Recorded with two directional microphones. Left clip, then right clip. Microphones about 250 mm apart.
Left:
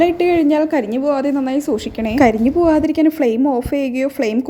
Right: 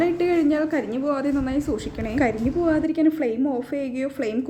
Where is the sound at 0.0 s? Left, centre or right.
Left.